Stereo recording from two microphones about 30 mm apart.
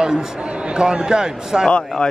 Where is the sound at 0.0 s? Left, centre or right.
Right.